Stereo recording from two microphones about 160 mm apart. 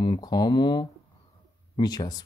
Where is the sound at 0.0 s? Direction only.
30° left (ahead or behind).